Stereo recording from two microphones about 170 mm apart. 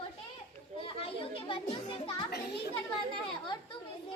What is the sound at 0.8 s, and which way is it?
Children playing, 30° left (ahead or behind).